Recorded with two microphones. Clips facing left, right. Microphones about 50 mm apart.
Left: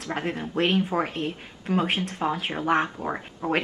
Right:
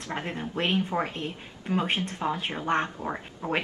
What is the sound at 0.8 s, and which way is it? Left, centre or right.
Speech, centre.